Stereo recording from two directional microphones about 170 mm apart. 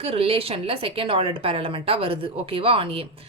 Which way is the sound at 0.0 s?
35° right (ahead or behind).